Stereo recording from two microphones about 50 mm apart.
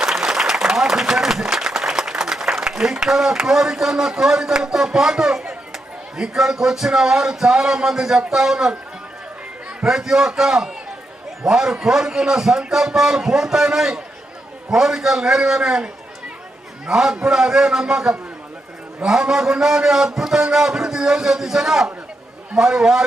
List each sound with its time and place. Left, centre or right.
0.0 s a man's voice: centre
9.8 s a man's voice: centre